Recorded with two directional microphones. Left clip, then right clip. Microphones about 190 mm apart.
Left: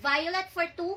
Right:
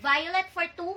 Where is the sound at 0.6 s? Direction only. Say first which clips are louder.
Even; centre (ahead or behind).